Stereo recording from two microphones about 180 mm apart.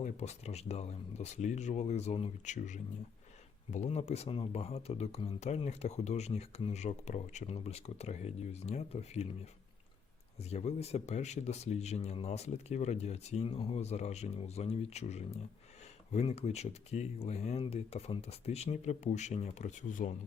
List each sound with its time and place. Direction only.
0.0 s speech: 40° left (ahead or behind)
10.3 s speech: 35° left (ahead or behind)